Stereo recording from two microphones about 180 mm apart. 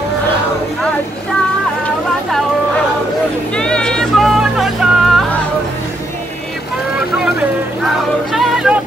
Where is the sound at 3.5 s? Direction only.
5° left (ahead or behind).